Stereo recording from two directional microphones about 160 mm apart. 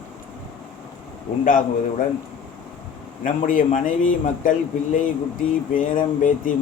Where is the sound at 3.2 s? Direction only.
55° left (ahead or behind).